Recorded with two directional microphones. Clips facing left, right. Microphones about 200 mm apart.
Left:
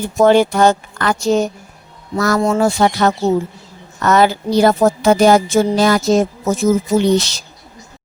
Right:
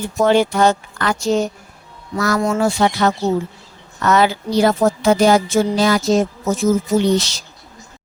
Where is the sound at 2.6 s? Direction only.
45° left (ahead or behind).